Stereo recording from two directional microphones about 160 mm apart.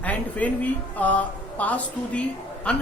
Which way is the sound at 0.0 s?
10° left (ahead or behind).